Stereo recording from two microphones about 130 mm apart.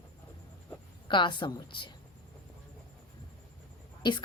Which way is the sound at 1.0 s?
40° left (ahead or behind).